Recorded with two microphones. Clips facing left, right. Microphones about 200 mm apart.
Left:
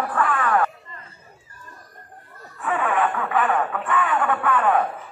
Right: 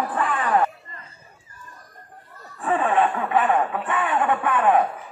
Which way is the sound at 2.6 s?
30° right (ahead or behind).